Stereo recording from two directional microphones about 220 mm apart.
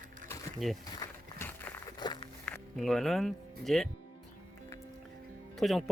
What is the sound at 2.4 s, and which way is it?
Speech, 5° left (ahead or behind).